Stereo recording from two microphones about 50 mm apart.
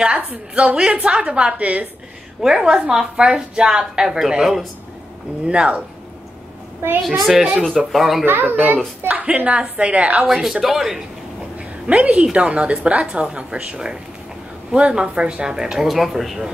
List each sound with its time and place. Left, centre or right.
0.6 s a woman's voice: centre
2.4 s a woman's voice: centre
7.0 s speech: centre
8.3 s a woman's voice: right
8.5 s a woman's voice: right
10.2 s speech: centre
12.0 s a woman's voice: right; by 16.4 s centre